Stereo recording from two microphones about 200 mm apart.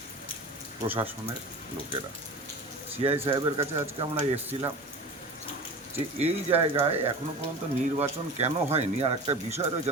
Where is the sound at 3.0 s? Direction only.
30° right (ahead or behind).